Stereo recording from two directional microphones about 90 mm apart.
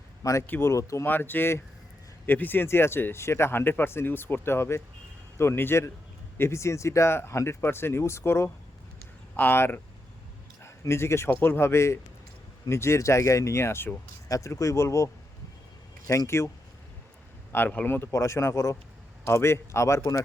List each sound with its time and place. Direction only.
0.2 s speech: 35° left (ahead or behind)
0.4 s speech: 20° left (ahead or behind)
0.7 s speech: 35° left (ahead or behind)
1.0 s speech: 20° left (ahead or behind)
17.5 s speech: 20° left (ahead or behind)
18.1 s speech: 35° left (ahead or behind)